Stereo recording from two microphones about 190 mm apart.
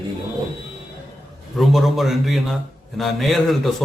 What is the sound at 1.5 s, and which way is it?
A man's voice, centre (ahead or behind).